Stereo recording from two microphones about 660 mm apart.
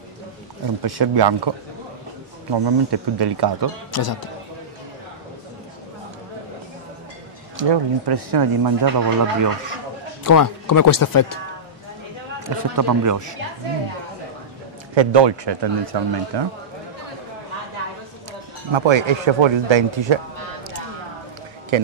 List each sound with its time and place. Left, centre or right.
0.8 s speech: right
2.5 s speech: right
3.9 s a man's voice: left
7.5 s speech: right
10.2 s speech: left
12.4 s a man's voice: right
15.0 s speech: right
18.7 s speech: right